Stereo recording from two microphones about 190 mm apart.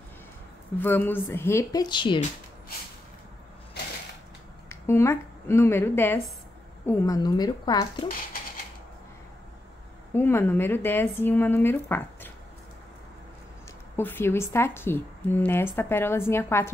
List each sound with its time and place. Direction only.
0.7 s a woman's voice: 10° left (ahead or behind)
4.6 s a woman's voice: 15° left (ahead or behind)
10.1 s a woman's voice: 10° left (ahead or behind)
13.9 s a woman's voice: 10° left (ahead or behind)